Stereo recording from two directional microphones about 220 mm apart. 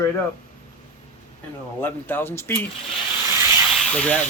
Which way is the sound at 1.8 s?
10° left (ahead or behind).